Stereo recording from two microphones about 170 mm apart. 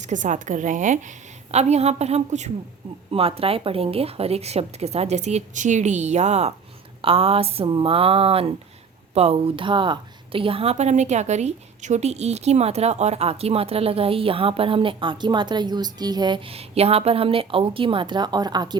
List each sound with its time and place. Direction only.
0.0 s a woman's voice: 45° right (ahead or behind); by 18.8 s 25° right (ahead or behind)